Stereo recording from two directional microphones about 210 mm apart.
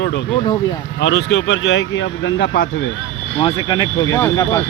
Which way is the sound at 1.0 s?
60° left (ahead or behind).